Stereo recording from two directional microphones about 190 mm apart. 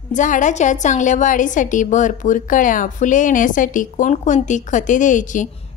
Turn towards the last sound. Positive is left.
turn(degrees=40)  # may be behind; listen again after turning